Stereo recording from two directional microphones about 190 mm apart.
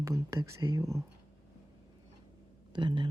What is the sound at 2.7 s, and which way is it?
Speech, 25° right (ahead or behind).